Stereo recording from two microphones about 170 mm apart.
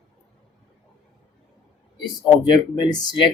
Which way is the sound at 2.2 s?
25° left (ahead or behind).